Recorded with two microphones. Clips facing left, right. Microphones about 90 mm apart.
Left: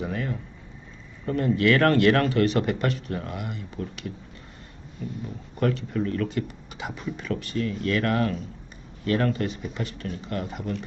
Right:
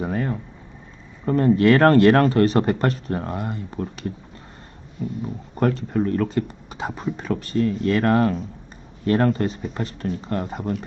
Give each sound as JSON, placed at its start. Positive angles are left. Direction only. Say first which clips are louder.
{"t": 0.0, "sound": "a sound", "louder": "right 5 dB", "side_deg": -35}
{"t": 1.2, "sound": "speech", "louder": "right 6 dB", "side_deg": -35}
{"t": 5.5, "sound": "speech", "louder": "right 4 dB", "side_deg": -40}